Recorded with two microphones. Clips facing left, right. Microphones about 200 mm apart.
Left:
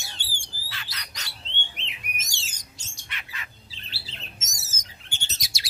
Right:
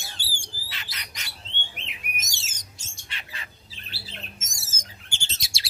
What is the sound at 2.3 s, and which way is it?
Bird, 20° right (ahead or behind).